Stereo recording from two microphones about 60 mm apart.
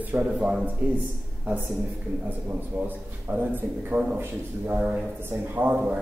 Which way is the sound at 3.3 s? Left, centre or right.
Right.